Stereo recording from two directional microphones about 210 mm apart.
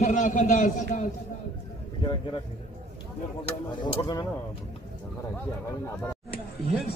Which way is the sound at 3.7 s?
20° left (ahead or behind).